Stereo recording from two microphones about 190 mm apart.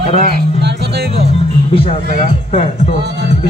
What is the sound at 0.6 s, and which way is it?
Music, 65° right (ahead or behind).